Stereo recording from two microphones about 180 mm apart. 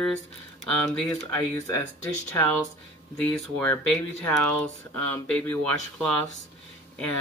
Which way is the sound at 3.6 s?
10° left (ahead or behind).